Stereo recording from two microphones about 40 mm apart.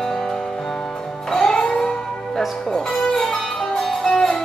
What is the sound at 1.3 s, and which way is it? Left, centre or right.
Music, centre.